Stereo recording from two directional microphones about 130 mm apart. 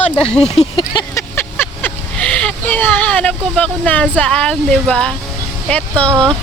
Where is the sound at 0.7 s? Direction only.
35° left (ahead or behind).